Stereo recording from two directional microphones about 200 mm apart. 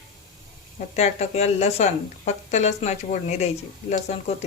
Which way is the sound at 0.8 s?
35° left (ahead or behind).